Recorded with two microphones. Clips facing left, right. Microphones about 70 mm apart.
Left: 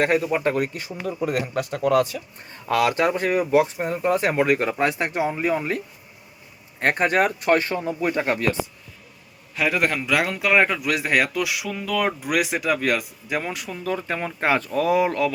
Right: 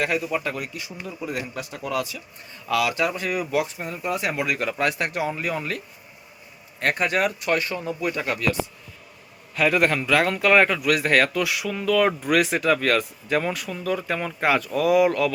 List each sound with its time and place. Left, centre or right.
0.0 s speech: left
9.6 s a man's voice: centre; by 15.3 s left